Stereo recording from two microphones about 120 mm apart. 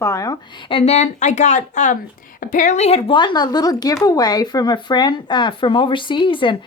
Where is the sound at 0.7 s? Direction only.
55° left (ahead or behind).